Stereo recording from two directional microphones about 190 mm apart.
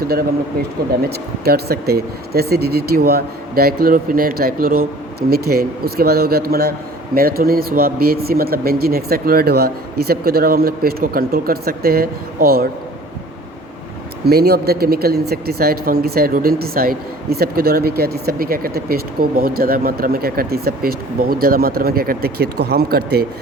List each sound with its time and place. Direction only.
1.1 s speech: 55° right (ahead or behind)
14.3 s speech: 55° right (ahead or behind)